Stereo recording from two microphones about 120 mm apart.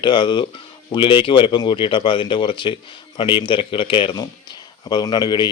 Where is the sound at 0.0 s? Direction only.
40° left (ahead or behind).